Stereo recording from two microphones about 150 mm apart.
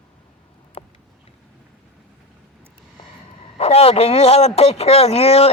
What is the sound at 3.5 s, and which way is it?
A man's voice, 45° left (ahead or behind).